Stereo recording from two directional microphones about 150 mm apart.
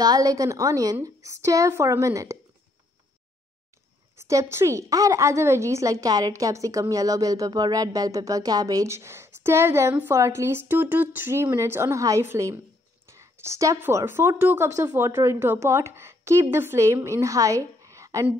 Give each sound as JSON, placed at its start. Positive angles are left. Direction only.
{"t": 0.0, "sound": "a woman's voice", "side_deg": -25}
{"t": 4.2, "sound": "a woman's voice", "side_deg": -20}